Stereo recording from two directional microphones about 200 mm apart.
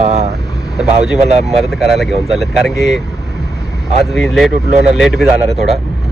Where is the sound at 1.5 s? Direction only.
Centre (ahead or behind).